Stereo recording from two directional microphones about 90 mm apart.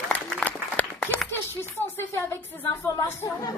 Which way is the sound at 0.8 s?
20° left (ahead or behind).